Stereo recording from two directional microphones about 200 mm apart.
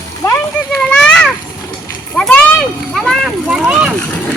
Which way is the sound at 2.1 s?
5° left (ahead or behind).